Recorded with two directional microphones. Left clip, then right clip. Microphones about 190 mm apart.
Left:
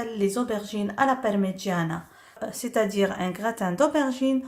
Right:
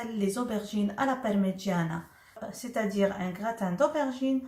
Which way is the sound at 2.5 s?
55° left (ahead or behind).